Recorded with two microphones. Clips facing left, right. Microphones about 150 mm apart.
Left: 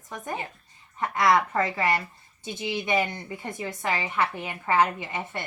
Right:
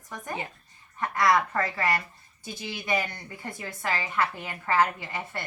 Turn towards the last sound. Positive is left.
turn(degrees=20)  # may be behind; listen again after turning